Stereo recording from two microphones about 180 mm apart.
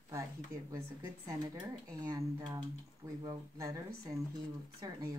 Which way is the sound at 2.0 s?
20° right (ahead or behind).